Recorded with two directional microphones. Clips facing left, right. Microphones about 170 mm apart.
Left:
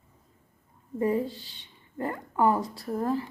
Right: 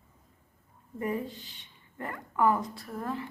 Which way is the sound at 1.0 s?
30° left (ahead or behind).